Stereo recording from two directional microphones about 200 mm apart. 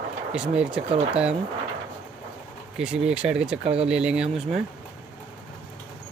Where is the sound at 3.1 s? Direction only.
5° right (ahead or behind).